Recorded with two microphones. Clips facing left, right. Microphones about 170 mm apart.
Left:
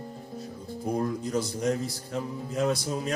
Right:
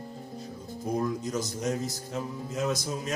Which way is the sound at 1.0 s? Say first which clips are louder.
Left 2 dB; 30° left (ahead or behind).